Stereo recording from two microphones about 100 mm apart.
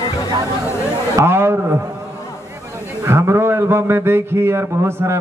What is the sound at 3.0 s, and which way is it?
A man's voice, 30° right (ahead or behind).